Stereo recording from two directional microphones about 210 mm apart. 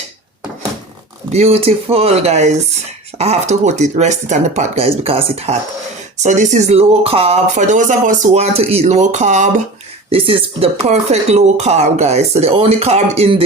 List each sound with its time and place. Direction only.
1.3 s speech: 30° right (ahead or behind)